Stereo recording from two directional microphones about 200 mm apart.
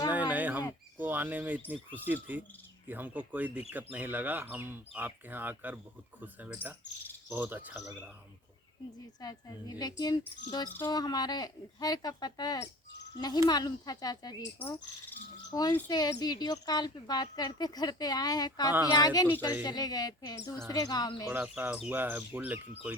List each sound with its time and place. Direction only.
0.1 s a sound: 10° right (ahead or behind)
1.7 s speech: 10° right (ahead or behind)
9.2 s cricket: 20° left (ahead or behind)
14.6 s cricket: 10° left (ahead or behind)
21.2 s speech: 5° right (ahead or behind)